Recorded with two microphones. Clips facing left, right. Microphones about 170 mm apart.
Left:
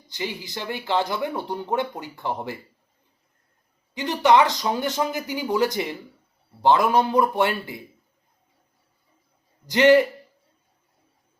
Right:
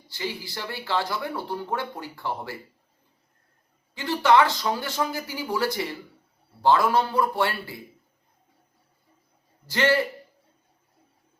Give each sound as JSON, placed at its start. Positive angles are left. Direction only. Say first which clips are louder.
{"t": 0.1, "sound": "speech", "louder": "left 2 dB", "side_deg": 20}
{"t": 3.9, "sound": "speech", "louder": "left 2 dB", "side_deg": 20}
{"t": 9.6, "sound": "a man's voice", "louder": "left 7 dB", "side_deg": 20}